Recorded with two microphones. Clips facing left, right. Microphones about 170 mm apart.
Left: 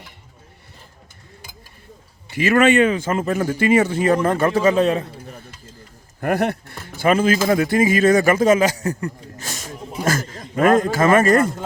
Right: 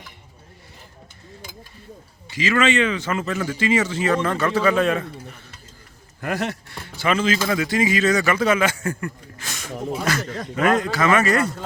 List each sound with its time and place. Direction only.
2.3 s speech: 60° left (ahead or behind)
4.5 s a man's voice: 40° left (ahead or behind)
6.1 s speech: 55° left (ahead or behind); by 9.6 s 35° left (ahead or behind)
10.0 s a sound: 45° left (ahead or behind)
10.5 s speech: 45° left (ahead or behind)